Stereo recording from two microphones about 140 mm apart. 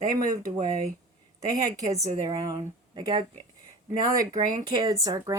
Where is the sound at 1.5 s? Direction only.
25° right (ahead or behind).